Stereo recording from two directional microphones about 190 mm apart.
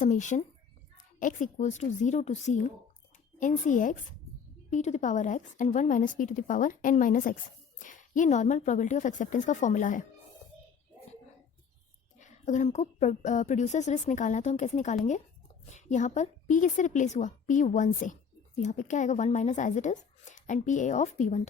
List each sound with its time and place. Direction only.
0.0 s a woman's voice: 40° left (ahead or behind)
12.2 s a woman's voice: 40° left (ahead or behind)